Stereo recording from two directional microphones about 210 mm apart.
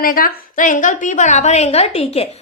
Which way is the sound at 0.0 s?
45° left (ahead or behind).